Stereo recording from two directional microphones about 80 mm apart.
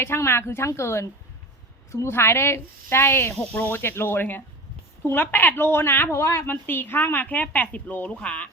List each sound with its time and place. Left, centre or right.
0.0 s a woman's voice: left; by 8.4 s centre